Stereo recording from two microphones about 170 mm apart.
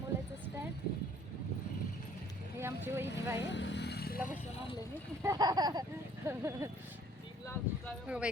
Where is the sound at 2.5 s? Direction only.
15° right (ahead or behind).